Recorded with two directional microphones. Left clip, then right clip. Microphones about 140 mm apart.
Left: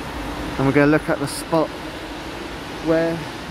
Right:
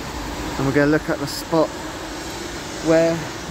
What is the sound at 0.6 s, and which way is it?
Speech, 30° left (ahead or behind).